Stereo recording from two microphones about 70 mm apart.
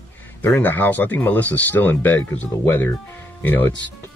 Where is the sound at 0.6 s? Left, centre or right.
Left.